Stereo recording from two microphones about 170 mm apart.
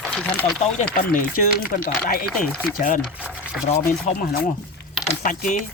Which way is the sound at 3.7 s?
55° left (ahead or behind).